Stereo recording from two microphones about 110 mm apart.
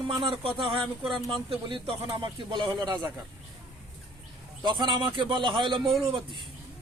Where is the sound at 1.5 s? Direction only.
50° right (ahead or behind).